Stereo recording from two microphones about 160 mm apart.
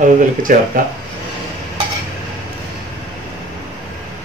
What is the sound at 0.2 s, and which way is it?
Speech, 60° right (ahead or behind).